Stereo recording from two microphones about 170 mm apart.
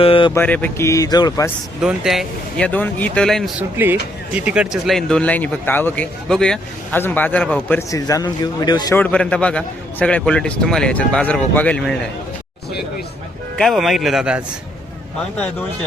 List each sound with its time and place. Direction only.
0.0 s mantra: 30° left (ahead or behind)
0.3 s speech: 10° left (ahead or behind)
1.8 s speech: 5° right (ahead or behind)
3.6 s speech: 10° right (ahead or behind); by 7.9 s 5° left (ahead or behind)
7.9 s a man's voice: 20° left (ahead or behind)
9.0 s speech: 10° left (ahead or behind)
13.6 s speech: centre (ahead or behind)